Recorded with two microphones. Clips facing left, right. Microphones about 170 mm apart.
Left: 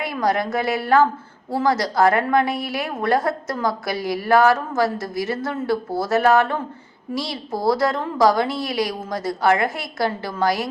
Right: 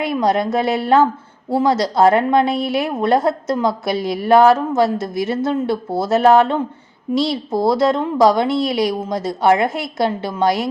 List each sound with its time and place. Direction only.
0.0 s a woman's voice: 25° right (ahead or behind)